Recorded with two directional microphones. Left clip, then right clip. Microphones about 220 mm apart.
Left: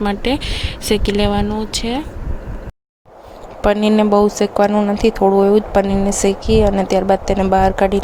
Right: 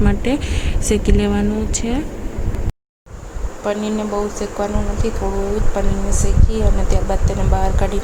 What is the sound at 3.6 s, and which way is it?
Speech, 40° left (ahead or behind).